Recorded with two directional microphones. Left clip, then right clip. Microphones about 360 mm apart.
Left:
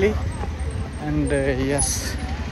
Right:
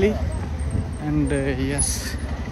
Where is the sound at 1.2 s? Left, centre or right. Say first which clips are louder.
Left 3 dB; centre.